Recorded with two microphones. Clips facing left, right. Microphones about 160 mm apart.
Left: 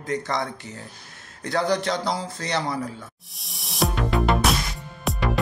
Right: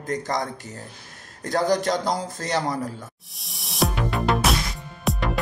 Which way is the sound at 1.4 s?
40° right (ahead or behind).